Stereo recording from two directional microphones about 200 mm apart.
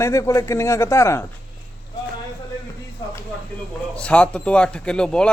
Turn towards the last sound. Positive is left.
turn(degrees=5)  # may be behind; listen again after turning